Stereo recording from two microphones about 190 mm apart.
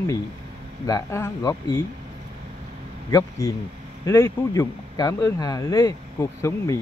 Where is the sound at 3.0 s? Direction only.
20° left (ahead or behind).